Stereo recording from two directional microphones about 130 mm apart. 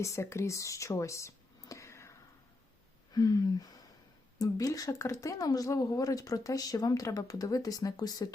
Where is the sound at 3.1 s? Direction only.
30° left (ahead or behind).